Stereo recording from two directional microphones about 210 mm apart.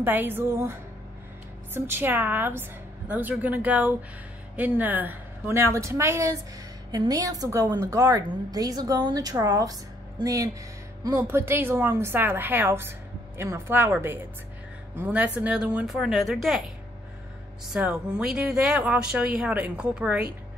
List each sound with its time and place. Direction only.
0.0 s a woman's voice: 10° right (ahead or behind)
17.7 s speech: 5° right (ahead or behind)